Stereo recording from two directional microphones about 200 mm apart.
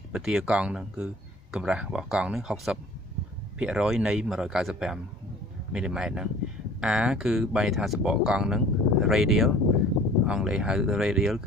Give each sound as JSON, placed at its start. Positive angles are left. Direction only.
{"t": 0.1, "sound": "a man's voice", "side_deg": -5}